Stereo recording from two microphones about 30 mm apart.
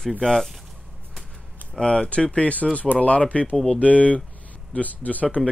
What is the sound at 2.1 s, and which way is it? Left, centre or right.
Speech, left.